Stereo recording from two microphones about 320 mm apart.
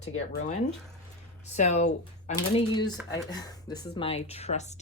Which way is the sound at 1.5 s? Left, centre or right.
Left.